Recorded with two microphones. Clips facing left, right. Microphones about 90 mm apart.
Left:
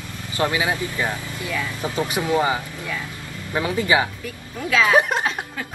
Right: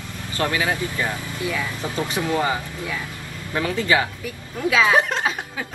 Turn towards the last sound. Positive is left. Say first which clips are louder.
# right 1 dB
turn(degrees=-5)  # may be behind; listen again after turning